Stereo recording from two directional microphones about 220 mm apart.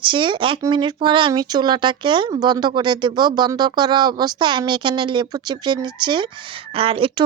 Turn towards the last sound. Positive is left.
turn(degrees=-25)  # may be behind; listen again after turning